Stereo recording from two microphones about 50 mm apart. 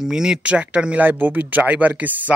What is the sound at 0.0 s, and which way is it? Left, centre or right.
Speech, centre.